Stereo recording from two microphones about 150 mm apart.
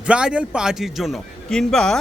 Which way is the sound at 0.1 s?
5° right (ahead or behind).